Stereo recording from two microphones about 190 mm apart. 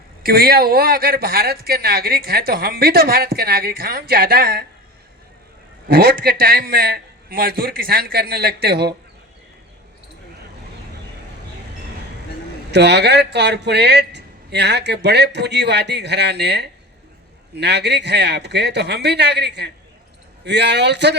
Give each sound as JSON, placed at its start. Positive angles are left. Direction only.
{"t": 0.2, "sound": "speech", "side_deg": -55}
{"t": 5.9, "sound": "speech", "side_deg": -50}
{"t": 12.7, "sound": "a man's voice", "side_deg": -60}